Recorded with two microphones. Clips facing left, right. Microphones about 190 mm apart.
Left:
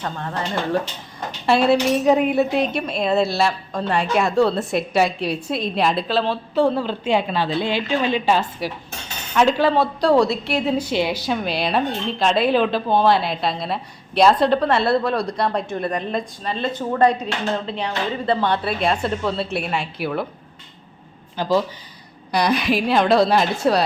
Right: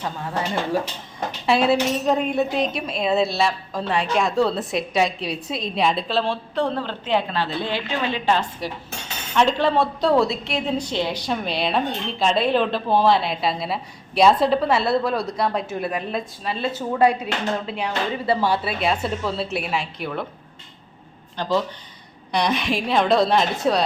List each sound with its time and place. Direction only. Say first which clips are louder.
0.0 s a woman's voice: even; 10° right (ahead or behind)
21.4 s a woman's voice: left 3 dB; 5° left (ahead or behind)